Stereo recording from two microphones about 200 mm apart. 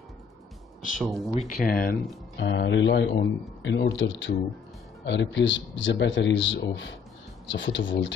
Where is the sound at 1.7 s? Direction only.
45° left (ahead or behind).